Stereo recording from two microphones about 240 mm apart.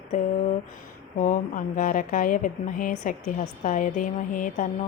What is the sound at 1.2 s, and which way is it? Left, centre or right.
Speech, left.